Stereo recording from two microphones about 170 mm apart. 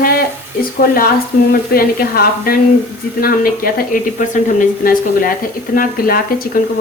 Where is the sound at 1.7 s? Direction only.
60° left (ahead or behind).